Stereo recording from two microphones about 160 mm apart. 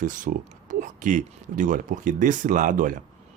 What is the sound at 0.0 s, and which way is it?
Speech, 55° right (ahead or behind).